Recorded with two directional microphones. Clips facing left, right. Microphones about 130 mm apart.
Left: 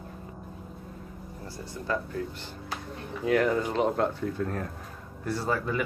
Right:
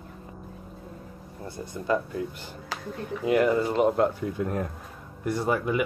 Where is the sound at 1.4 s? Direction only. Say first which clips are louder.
Right 4 dB; 20° right (ahead or behind).